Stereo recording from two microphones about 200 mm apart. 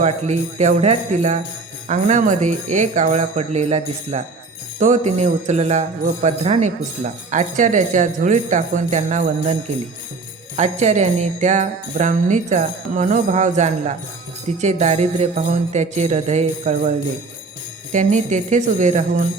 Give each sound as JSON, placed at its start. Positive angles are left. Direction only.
{"t": 0.0, "sound": "speech", "side_deg": -35}
{"t": 10.6, "sound": "speech", "side_deg": -35}
{"t": 17.9, "sound": "speech", "side_deg": -40}